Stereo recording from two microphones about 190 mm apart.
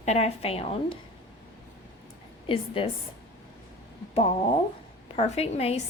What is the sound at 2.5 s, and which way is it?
Speech, 30° left (ahead or behind).